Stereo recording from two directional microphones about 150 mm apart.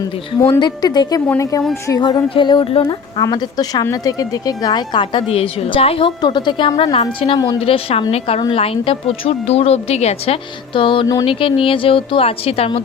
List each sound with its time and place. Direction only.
0.6 s a woman's voice: 25° left (ahead or behind)
3.2 s a woman's voice: 25° left (ahead or behind)
7.3 s speech: 25° left (ahead or behind)
7.6 s a woman's voice: 40° left (ahead or behind)
10.8 s speech: 35° left (ahead or behind)
11.3 s a woman's voice: 35° left (ahead or behind)